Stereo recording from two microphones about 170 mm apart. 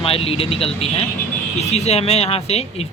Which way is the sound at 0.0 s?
35° left (ahead or behind).